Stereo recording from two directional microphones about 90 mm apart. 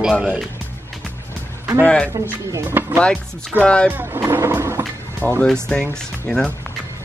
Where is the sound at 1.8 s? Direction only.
10° left (ahead or behind).